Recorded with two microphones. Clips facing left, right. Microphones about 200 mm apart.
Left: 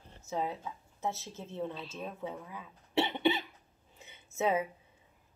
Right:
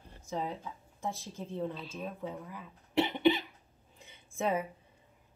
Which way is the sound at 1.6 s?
Centre (ahead or behind).